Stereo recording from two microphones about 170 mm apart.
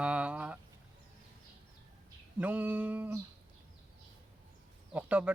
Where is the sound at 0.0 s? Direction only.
5° right (ahead or behind).